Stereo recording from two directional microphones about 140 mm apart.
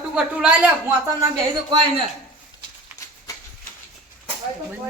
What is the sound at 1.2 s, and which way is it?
Speech, 30° right (ahead or behind).